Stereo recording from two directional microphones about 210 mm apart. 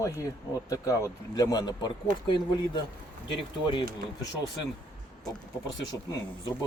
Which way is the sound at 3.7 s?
20° left (ahead or behind).